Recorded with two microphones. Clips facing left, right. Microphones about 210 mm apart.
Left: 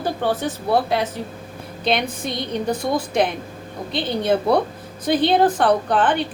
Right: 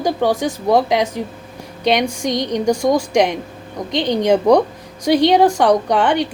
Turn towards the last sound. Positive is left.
turn(degrees=-15)  # may be behind; listen again after turning